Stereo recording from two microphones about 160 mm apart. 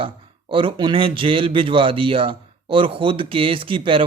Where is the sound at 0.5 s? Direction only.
30° right (ahead or behind).